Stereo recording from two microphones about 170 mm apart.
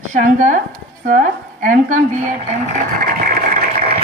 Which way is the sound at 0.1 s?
50° right (ahead or behind).